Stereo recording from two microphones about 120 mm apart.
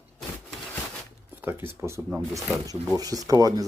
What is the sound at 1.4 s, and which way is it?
Speech, 20° right (ahead or behind).